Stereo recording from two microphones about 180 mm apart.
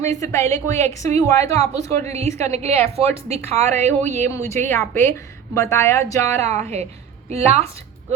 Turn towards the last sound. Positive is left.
turn(degrees=-35)  # may be behind; listen again after turning